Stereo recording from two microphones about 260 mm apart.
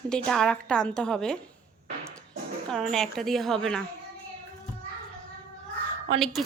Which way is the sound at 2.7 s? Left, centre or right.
Centre.